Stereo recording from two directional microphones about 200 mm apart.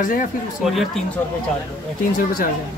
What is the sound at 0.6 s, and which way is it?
Speech, centre (ahead or behind).